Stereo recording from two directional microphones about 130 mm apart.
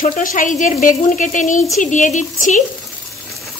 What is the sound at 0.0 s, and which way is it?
A woman's voice, 90° left.